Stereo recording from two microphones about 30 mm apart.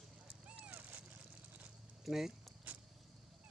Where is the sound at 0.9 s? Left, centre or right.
Right.